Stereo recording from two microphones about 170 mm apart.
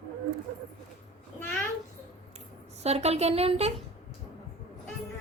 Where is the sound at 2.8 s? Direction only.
40° right (ahead or behind).